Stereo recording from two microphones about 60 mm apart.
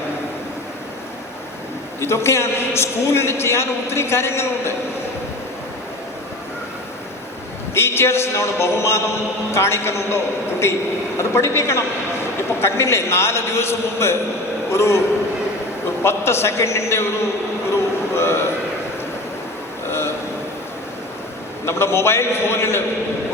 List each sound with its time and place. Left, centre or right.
2.0 s a man's voice: left
7.7 s a man's voice: left
11.2 s a man's voice: left
16.0 s a man's voice: left
17.7 s a sound: left
19.9 s a sound: left
21.7 s a man's voice: left